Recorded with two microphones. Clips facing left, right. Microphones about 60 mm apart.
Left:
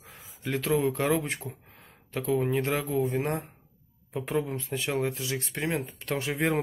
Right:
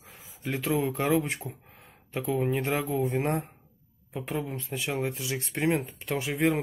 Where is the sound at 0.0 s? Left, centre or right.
Centre.